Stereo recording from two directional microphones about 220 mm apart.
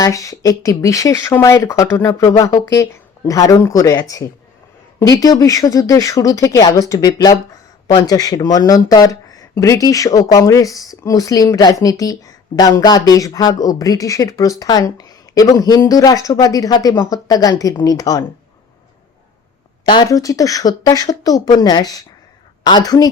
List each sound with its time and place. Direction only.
0.0 s speech: 15° left (ahead or behind)
19.9 s speech: 15° left (ahead or behind)